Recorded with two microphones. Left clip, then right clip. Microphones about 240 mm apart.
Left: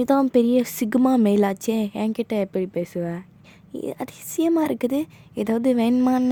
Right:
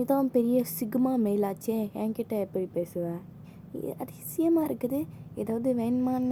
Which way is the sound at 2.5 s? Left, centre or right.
Left.